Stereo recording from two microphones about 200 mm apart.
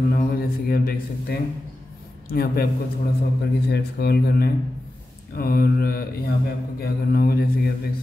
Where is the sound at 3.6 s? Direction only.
55° left (ahead or behind).